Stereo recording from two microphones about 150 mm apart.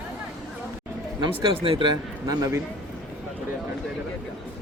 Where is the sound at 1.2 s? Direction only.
35° right (ahead or behind).